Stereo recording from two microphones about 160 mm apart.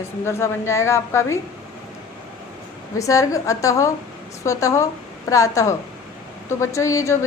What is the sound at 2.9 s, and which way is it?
A woman's voice, 20° left (ahead or behind).